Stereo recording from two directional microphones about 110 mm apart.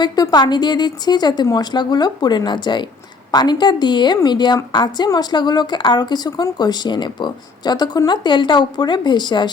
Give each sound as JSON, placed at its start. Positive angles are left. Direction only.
{"t": 0.0, "sound": "a woman's voice", "side_deg": 40}